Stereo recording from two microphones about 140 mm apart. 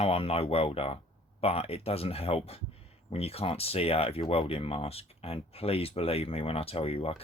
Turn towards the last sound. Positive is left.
turn(degrees=45)  # may be behind; listen again after turning